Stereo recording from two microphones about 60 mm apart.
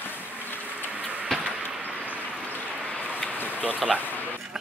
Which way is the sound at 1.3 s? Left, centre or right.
Centre.